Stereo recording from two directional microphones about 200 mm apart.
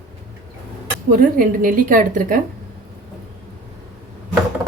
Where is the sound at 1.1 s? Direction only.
45° right (ahead or behind).